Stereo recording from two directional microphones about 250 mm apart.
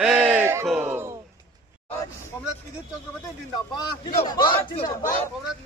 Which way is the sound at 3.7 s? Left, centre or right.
Centre.